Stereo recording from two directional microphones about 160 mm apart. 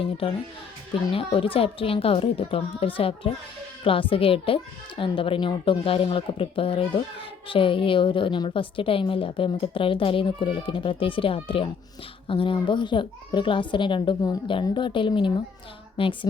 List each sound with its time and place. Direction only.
0.0 s a woman's voice: 35° left (ahead or behind)